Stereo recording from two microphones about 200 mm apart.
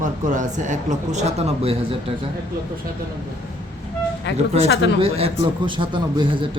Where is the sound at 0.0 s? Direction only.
40° right (ahead or behind).